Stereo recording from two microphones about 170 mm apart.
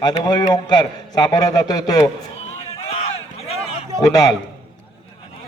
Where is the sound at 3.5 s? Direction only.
35° left (ahead or behind).